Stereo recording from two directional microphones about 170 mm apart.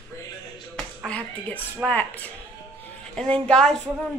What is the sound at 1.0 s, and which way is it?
A woman's voice, 5° left (ahead or behind).